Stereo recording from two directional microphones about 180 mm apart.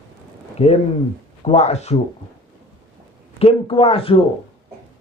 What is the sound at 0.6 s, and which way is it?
A man's voice, 35° left (ahead or behind).